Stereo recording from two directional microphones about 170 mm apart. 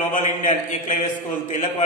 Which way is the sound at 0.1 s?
45° left (ahead or behind).